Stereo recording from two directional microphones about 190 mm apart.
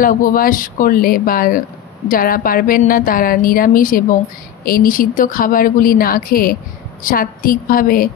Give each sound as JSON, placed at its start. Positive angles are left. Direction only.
{"t": 0.0, "sound": "a woman's voice", "side_deg": 50}